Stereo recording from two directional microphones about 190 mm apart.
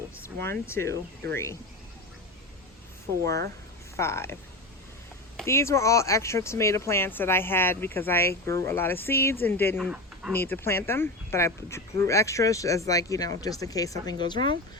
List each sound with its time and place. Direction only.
0.3 s speech: 10° left (ahead or behind)
3.9 s speech: 15° left (ahead or behind)
5.5 s speech: 15° left (ahead or behind)
9.7 s speech: 5° right (ahead or behind)
10.3 s speech: 10° left (ahead or behind)